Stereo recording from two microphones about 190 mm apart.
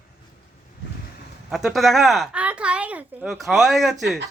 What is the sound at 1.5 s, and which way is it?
Speech, centre (ahead or behind).